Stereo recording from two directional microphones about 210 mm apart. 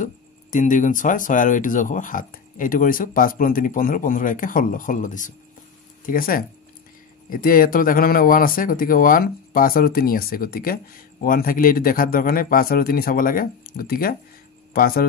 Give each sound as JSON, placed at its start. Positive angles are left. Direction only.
{"t": 0.0, "sound": "speech", "side_deg": 40}